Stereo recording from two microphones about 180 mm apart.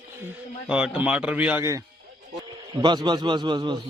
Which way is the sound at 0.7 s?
5° right (ahead or behind).